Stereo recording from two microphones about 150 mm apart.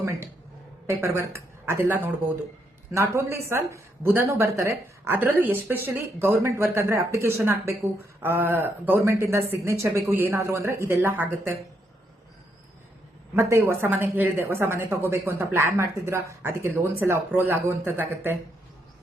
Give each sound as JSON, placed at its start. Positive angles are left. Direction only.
{"t": 0.9, "sound": "speech", "side_deg": -15}
{"t": 13.3, "sound": "speech", "side_deg": -15}